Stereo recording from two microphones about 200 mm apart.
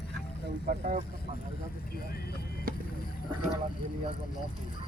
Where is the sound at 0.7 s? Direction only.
40° right (ahead or behind).